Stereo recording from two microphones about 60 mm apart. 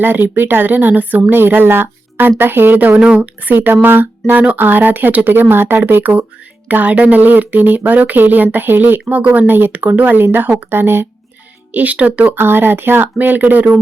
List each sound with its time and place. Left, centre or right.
0.0 s speech: right
3.0 s speech: centre
3.5 s speech: right
11.7 s speech: right
12.4 s speech: right